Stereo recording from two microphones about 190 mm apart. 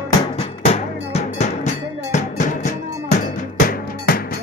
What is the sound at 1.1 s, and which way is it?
Music, 40° left (ahead or behind).